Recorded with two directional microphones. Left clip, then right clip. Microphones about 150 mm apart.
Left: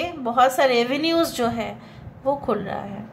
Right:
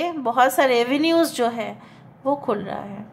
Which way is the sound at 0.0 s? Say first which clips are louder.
Even; 30° right (ahead or behind).